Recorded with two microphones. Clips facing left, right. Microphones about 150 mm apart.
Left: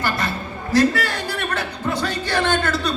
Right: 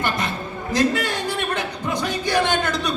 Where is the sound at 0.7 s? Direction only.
20° right (ahead or behind).